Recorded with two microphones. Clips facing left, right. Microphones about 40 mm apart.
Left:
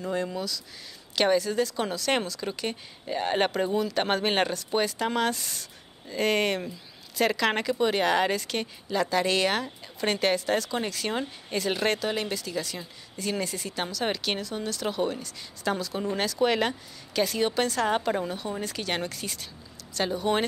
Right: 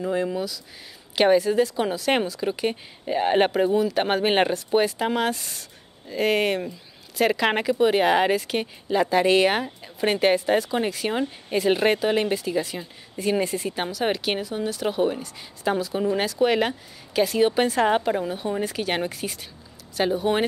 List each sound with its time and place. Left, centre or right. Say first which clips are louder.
0.0 s speech: right 5 dB; centre
18.0 s speech: right 4 dB; centre